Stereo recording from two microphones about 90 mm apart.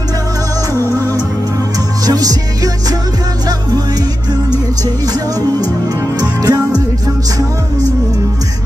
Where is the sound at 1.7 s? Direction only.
45° right (ahead or behind).